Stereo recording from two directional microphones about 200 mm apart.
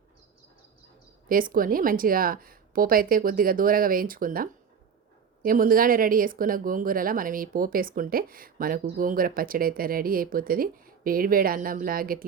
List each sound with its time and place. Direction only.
1.3 s speech: 45° right (ahead or behind)